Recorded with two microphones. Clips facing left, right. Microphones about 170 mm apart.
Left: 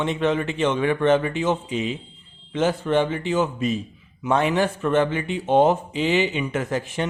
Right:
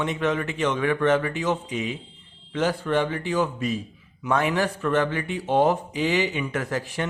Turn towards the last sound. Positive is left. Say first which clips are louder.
# left 3 dB
turn(degrees=20)  # may be behind; listen again after turning